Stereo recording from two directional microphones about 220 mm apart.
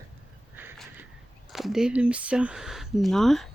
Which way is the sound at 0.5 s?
10° right (ahead or behind).